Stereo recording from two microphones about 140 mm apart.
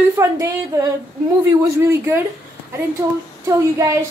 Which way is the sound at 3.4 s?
20° right (ahead or behind).